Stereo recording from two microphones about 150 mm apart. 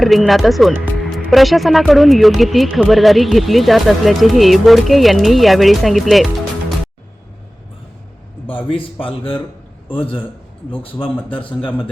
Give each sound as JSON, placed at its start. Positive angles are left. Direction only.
{"t": 0.0, "sound": "speech", "side_deg": 0}
{"t": 8.7, "sound": "a man's voice", "side_deg": 35}